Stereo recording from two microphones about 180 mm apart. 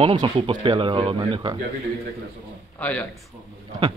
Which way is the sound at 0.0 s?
25° right (ahead or behind).